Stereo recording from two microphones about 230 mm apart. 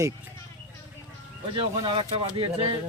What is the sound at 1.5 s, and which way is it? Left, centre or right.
Speech, right.